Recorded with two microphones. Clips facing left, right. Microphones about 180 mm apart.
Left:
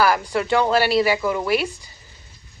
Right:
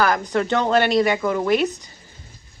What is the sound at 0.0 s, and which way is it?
A man's voice, 10° left (ahead or behind).